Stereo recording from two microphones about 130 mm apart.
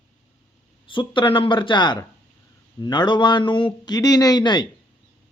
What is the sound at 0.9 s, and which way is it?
Speech, 40° left (ahead or behind).